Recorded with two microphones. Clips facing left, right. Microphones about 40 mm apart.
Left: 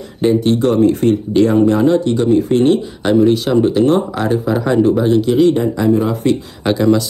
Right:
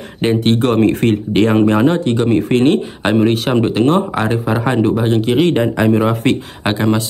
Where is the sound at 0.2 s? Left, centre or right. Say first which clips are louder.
Left 1 dB; right.